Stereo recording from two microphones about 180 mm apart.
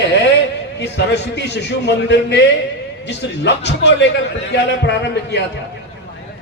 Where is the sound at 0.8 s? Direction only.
70° left (ahead or behind).